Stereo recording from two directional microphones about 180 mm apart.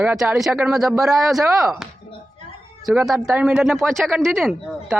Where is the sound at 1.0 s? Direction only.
Centre (ahead or behind).